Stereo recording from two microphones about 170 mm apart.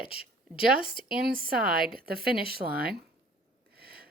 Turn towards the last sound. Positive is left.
turn(degrees=-65)  # may be behind; listen again after turning